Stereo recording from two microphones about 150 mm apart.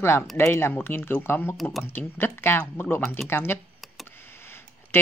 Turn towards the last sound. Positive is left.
turn(degrees=15)  # may be behind; listen again after turning